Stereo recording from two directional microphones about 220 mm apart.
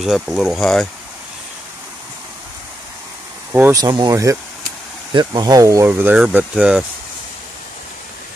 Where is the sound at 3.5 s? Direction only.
10° right (ahead or behind).